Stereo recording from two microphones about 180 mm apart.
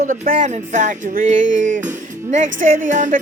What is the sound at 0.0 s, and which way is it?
Speech, 45° right (ahead or behind).